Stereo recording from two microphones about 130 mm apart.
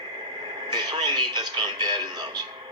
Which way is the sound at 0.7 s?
35° right (ahead or behind).